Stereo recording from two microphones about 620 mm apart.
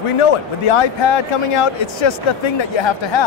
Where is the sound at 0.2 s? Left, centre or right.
Left.